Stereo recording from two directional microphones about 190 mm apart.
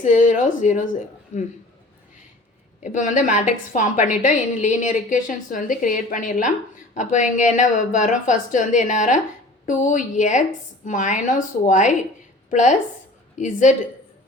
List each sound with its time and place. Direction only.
0.0 s a woman's voice: 40° left (ahead or behind)
2.8 s a woman's voice: 40° left (ahead or behind)